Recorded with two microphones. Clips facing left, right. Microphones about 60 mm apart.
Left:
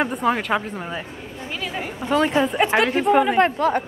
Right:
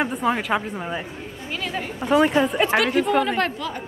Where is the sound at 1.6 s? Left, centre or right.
Centre.